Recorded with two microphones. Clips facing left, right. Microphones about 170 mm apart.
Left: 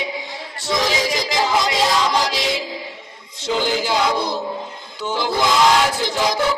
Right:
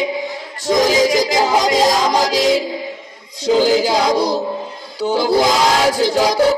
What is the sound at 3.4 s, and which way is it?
Speech, 40° right (ahead or behind).